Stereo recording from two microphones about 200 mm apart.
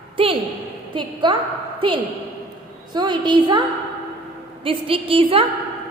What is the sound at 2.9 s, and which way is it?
Speech, 20° right (ahead or behind).